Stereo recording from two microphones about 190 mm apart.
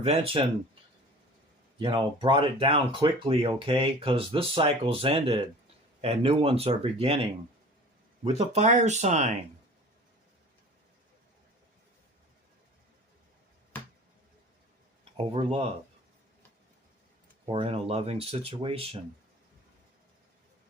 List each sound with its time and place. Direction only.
0.0 s speech: 30° right (ahead or behind)
1.8 s speech: 25° right (ahead or behind)
15.2 s speech: 30° right (ahead or behind)
17.5 s speech: 30° right (ahead or behind)